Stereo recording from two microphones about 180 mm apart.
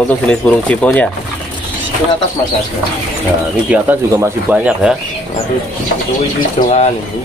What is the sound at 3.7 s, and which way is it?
Speech, 10° right (ahead or behind).